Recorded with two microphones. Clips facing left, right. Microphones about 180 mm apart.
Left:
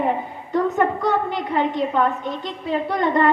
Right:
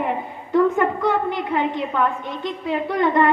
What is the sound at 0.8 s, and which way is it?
A woman's voice, 40° left (ahead or behind).